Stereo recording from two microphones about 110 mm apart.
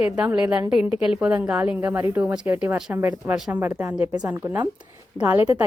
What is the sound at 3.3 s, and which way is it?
A woman's voice, 5° right (ahead or behind).